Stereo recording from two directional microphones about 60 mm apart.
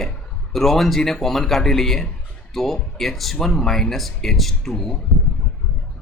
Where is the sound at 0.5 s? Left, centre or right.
Centre.